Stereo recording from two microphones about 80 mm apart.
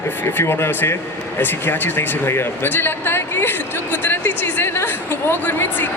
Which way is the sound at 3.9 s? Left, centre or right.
Left.